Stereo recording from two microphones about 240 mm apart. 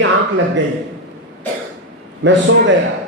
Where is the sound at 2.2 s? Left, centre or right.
Right.